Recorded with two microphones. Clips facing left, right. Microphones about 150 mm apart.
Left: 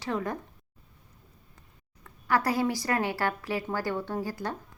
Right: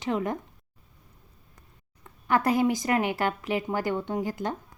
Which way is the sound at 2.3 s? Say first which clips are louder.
Right 3 dB; 20° right (ahead or behind).